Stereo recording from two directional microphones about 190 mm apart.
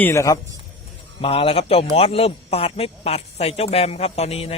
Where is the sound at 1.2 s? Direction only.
30° left (ahead or behind).